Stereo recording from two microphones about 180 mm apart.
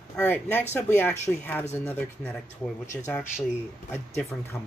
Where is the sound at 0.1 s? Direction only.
10° left (ahead or behind).